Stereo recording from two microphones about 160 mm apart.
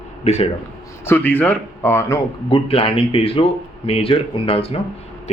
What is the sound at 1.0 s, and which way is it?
Speech, 10° left (ahead or behind).